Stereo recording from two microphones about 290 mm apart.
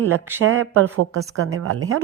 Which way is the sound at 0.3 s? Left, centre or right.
Right.